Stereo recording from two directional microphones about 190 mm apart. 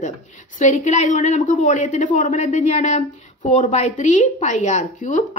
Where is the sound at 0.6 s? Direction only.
40° left (ahead or behind).